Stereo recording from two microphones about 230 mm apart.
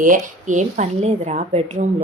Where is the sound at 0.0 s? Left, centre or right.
Right.